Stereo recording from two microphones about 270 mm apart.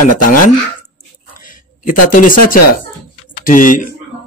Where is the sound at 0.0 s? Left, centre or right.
Left.